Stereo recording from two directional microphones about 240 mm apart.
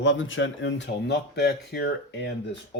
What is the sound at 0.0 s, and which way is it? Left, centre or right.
Speech, left.